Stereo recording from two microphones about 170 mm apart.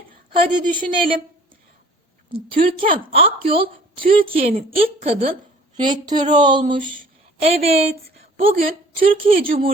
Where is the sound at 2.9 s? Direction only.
35° right (ahead or behind).